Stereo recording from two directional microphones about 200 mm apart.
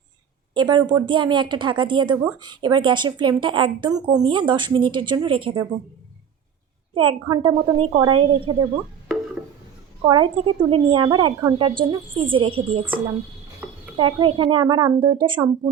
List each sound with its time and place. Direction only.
0.5 s speech: 20° right (ahead or behind)
6.9 s speech: 25° right (ahead or behind)
10.1 s speech: 25° right (ahead or behind)